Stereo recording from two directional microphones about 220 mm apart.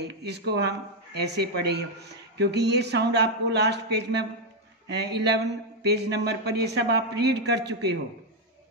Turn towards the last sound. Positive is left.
turn(degrees=-50)  # may be behind; listen again after turning